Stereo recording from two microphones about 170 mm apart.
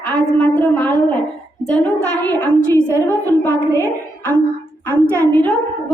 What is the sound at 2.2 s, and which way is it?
A woman's voice, 10° left (ahead or behind).